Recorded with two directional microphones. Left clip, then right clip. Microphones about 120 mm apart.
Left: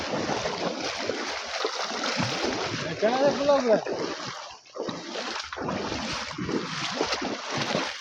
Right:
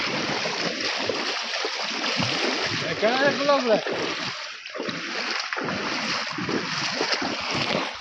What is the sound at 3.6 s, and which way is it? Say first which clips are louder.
Speech: right 1 dB; 5° right (ahead or behind).